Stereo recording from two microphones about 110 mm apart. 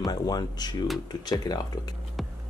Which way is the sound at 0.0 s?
40° left (ahead or behind).